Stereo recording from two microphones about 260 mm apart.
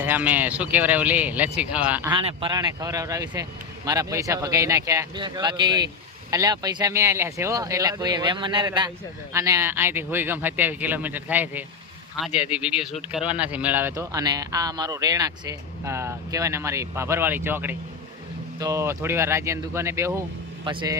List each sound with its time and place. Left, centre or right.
0.0 s a man's voice: centre